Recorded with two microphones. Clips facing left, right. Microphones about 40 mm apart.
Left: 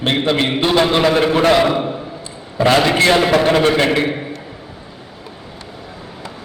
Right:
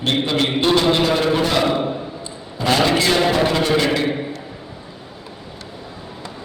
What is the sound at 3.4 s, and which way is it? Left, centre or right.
Speech, left.